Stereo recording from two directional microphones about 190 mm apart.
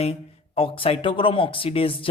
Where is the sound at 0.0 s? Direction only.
30° left (ahead or behind).